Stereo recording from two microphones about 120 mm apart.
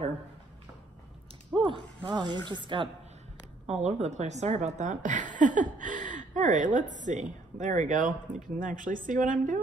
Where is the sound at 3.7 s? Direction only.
75° right (ahead or behind).